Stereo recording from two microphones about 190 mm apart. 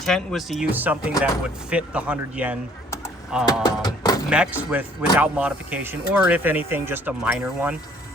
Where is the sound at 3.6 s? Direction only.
20° left (ahead or behind).